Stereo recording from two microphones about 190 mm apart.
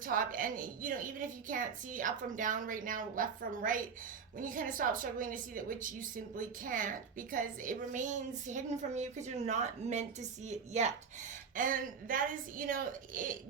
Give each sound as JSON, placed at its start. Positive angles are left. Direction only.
{"t": 0.0, "sound": "a woman's voice", "side_deg": -45}